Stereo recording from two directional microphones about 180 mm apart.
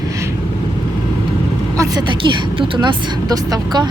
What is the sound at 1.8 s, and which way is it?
A woman's voice, 20° right (ahead or behind).